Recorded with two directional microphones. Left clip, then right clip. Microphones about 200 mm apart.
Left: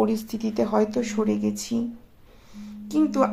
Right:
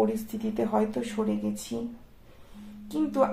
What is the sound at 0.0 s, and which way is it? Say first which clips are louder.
Speech: left 3 dB; 30° left (ahead or behind).